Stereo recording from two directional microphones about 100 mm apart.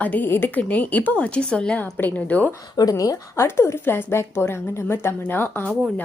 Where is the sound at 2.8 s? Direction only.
35° left (ahead or behind); by 5.7 s 20° left (ahead or behind).